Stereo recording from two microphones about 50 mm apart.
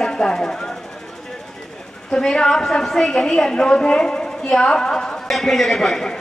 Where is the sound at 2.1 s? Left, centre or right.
Centre.